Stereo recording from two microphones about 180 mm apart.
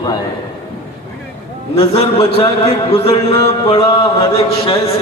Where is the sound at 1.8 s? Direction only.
35° left (ahead or behind).